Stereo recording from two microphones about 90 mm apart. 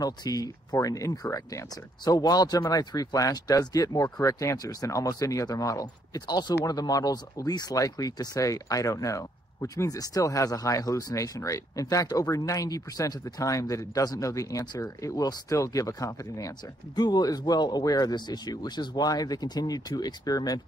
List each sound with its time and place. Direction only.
0.0 s speech: 45° left (ahead or behind)